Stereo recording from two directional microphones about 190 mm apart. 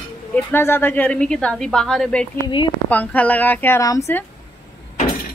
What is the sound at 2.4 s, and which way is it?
Speech, 25° left (ahead or behind).